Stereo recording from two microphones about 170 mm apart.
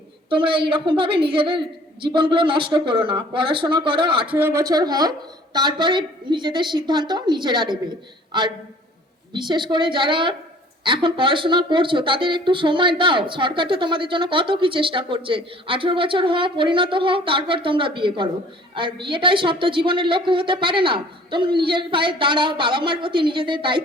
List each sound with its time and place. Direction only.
0.3 s speech: 30° right (ahead or behind)
4.3 s speech: 10° right (ahead or behind); by 23.8 s 30° right (ahead or behind)